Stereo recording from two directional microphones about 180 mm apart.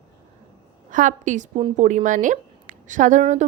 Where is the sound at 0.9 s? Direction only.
45° right (ahead or behind).